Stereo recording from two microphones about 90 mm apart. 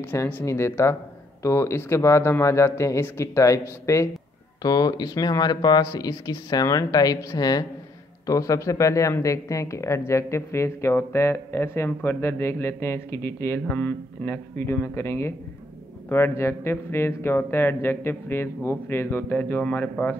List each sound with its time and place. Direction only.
0.0 s a man's voice: 20° left (ahead or behind)
4.6 s speech: 50° left (ahead or behind); by 13.6 s 25° left (ahead or behind)
13.7 s speech: 15° left (ahead or behind)